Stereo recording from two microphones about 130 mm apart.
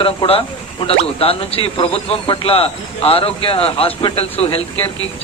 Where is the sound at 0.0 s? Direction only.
45° left (ahead or behind).